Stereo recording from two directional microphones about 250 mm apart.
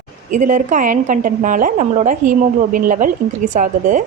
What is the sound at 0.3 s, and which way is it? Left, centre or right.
A woman's voice, right.